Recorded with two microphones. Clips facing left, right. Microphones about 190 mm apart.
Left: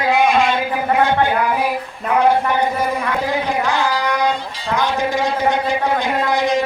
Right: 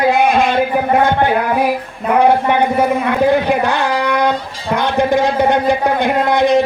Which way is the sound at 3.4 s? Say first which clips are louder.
Right 4 dB; 60° right (ahead or behind).